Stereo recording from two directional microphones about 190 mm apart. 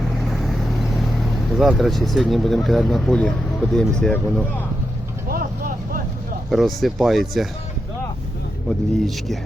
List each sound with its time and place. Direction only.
0.2 s speech: centre (ahead or behind)
5.3 s vehicle: 50° right (ahead or behind)
6.5 s speech: centre (ahead or behind)
9.0 s speech: centre (ahead or behind)